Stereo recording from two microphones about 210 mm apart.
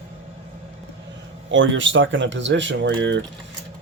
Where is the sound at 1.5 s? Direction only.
65° right (ahead or behind).